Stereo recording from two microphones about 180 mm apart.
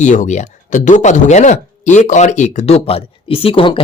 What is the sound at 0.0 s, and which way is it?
Speech, 40° left (ahead or behind).